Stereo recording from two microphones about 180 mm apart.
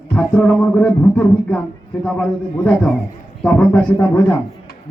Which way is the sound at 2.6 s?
5° left (ahead or behind).